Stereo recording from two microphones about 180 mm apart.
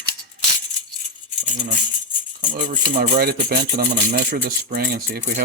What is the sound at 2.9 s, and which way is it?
Speech, 55° right (ahead or behind).